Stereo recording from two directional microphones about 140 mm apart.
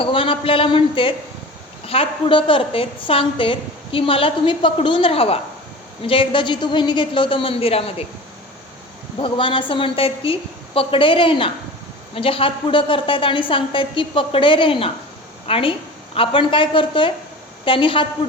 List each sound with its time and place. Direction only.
0.0 s a woman's voice: 40° left (ahead or behind)
9.1 s a woman's voice: 35° left (ahead or behind)